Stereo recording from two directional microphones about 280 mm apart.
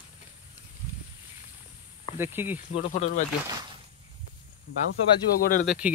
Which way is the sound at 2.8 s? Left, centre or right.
Left.